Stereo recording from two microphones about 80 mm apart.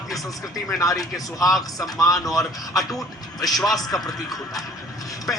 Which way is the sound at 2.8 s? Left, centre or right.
Centre.